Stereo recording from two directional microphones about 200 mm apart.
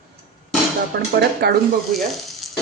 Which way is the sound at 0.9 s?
50° right (ahead or behind).